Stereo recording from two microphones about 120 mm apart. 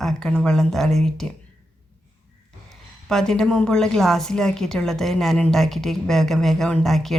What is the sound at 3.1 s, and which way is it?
A woman's voice, 5° left (ahead or behind).